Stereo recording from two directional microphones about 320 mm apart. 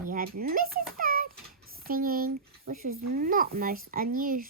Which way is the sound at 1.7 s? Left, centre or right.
Right.